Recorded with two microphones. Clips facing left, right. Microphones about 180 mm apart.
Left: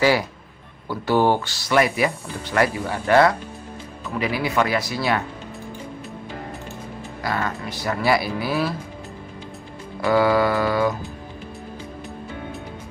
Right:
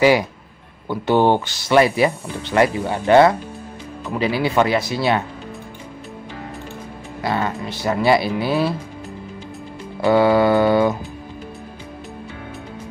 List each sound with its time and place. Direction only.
0.8 s speech: 20° right (ahead or behind)
7.2 s speech: 25° right (ahead or behind)
10.0 s speech: 25° right (ahead or behind)